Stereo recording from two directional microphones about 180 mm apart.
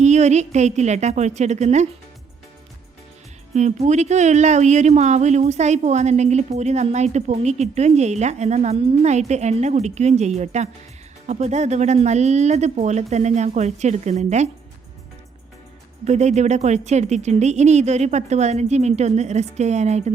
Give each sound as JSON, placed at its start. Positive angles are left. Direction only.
{"t": 0.0, "sound": "speech", "side_deg": -40}
{"t": 3.5, "sound": "speech", "side_deg": -40}
{"t": 16.0, "sound": "speech", "side_deg": -40}